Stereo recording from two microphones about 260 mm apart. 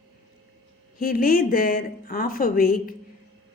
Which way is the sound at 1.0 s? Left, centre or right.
Left.